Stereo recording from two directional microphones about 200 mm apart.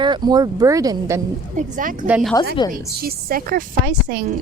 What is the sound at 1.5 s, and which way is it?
Speech, 40° right (ahead or behind).